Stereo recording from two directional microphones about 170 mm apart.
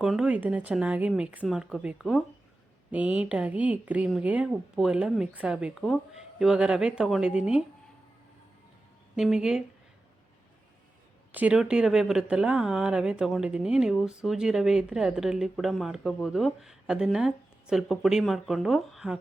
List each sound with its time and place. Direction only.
0.0 s speech: 5° right (ahead or behind)
9.1 s speech: 5° right (ahead or behind)
11.3 s speech: 10° right (ahead or behind)